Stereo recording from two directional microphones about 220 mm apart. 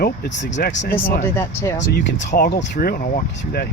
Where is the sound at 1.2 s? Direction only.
10° left (ahead or behind).